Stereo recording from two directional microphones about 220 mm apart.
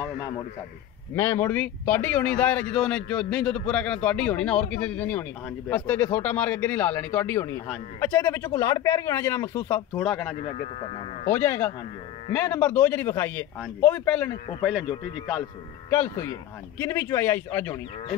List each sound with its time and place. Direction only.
1.1 s speech: 10° left (ahead or behind)
10.4 s speech: 30° left (ahead or behind)
11.2 s speech: 10° left (ahead or behind)
14.6 s speech: 5° right (ahead or behind)
15.9 s speech: 15° left (ahead or behind)